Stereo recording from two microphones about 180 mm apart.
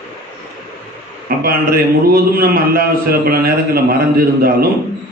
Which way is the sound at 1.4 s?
55° right (ahead or behind).